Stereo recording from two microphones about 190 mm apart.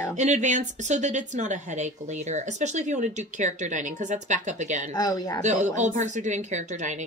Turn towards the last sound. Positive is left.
turn(degrees=-40)  # may be behind; listen again after turning